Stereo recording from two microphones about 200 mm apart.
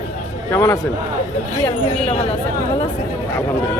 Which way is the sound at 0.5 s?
15° left (ahead or behind).